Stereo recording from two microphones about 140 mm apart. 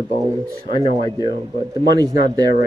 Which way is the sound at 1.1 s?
25° right (ahead or behind).